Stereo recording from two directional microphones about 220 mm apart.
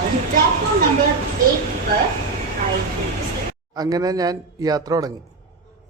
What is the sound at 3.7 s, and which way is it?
A man's voice, 15° right (ahead or behind).